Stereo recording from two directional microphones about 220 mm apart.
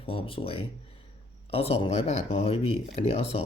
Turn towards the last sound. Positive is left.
turn(degrees=25)  # may be behind; listen again after turning